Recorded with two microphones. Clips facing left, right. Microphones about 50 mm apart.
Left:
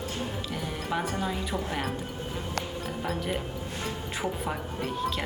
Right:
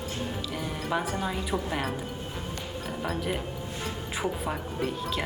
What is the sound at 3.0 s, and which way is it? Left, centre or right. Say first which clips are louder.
A woman's voice: right 1 dB; centre.